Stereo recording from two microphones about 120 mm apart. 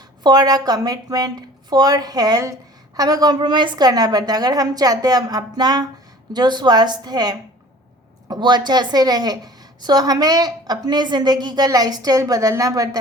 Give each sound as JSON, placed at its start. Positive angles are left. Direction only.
{"t": 0.2, "sound": "a woman's voice", "side_deg": -35}